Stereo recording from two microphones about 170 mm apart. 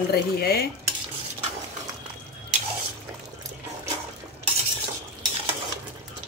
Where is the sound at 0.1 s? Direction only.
65° left (ahead or behind).